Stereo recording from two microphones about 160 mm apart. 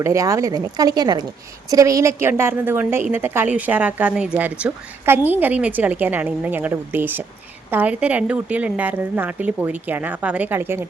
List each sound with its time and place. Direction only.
0.0 s a woman's voice: 20° right (ahead or behind)